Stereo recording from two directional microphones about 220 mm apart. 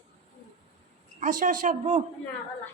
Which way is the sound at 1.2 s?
35° right (ahead or behind).